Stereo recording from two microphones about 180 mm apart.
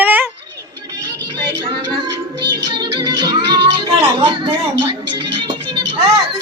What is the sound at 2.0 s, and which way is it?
Music, 25° right (ahead or behind).